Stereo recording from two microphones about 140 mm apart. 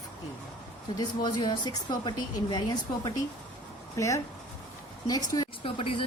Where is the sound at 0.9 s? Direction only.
30° left (ahead or behind).